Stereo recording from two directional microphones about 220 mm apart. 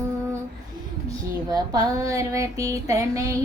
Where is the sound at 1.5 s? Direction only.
15° right (ahead or behind).